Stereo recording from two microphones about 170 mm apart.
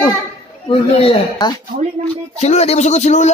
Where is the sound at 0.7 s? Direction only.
35° left (ahead or behind).